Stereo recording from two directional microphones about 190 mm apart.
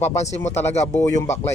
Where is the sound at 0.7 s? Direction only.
35° left (ahead or behind).